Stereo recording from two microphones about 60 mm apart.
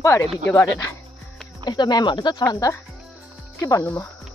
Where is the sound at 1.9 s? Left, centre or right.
Left.